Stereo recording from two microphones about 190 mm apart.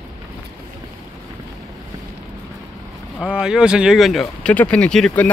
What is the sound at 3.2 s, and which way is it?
Speech, 5° right (ahead or behind).